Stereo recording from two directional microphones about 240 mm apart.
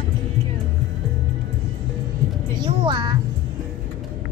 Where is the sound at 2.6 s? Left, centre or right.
Centre.